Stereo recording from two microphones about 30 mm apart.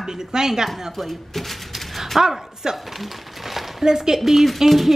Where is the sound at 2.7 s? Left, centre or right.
Centre.